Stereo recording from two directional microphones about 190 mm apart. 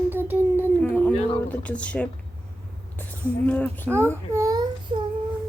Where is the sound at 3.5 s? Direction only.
10° left (ahead or behind).